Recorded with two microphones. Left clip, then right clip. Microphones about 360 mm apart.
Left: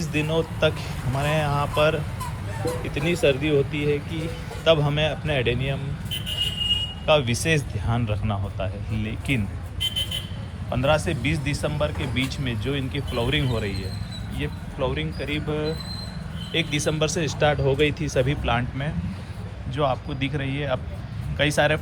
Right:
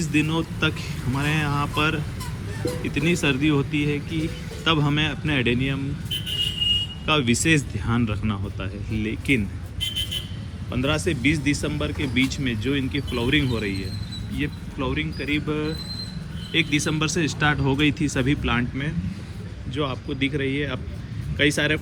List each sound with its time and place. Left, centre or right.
0.1 s speech: centre
6.1 s a sound: centre
7.0 s speech: centre
10.7 s speech: centre